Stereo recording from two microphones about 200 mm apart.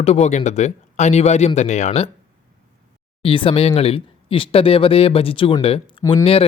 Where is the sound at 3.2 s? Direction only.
25° left (ahead or behind).